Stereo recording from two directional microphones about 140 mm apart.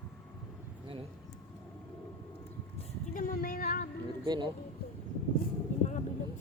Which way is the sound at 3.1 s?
75° left (ahead or behind).